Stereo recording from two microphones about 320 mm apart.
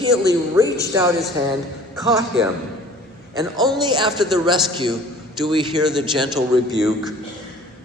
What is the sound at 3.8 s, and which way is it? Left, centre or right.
A man's voice, centre.